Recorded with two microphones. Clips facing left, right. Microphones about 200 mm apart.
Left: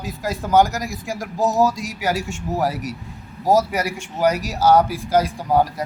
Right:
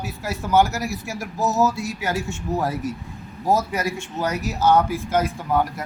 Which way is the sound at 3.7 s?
15° left (ahead or behind).